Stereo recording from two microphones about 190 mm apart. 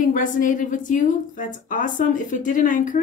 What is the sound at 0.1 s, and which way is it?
A woman's voice, 45° left (ahead or behind).